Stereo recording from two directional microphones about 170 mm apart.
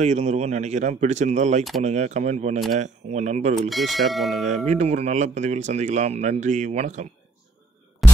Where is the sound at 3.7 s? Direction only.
Centre (ahead or behind).